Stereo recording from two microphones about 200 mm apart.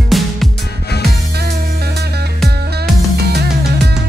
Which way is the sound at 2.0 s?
55° right (ahead or behind).